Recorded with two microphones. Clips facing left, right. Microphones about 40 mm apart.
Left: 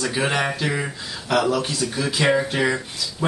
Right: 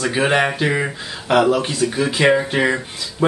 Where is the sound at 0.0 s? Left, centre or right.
Right.